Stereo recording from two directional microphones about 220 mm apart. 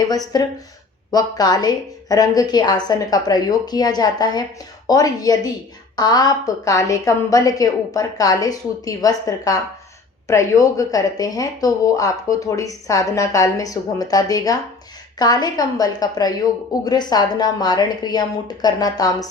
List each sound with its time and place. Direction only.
0.3 s speech: 15° left (ahead or behind)